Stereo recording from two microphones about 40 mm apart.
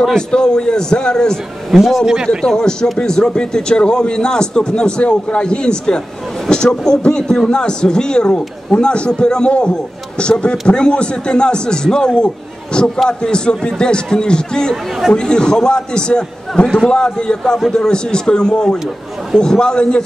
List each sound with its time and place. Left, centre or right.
0.1 s a man's voice: centre
1.7 s a man's voice: centre
2.4 s a man's voice: centre